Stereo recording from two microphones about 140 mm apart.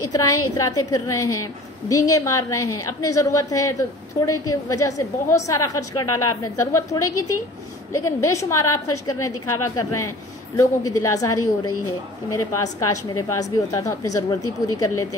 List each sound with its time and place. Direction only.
0.0 s a woman's voice: 25° left (ahead or behind)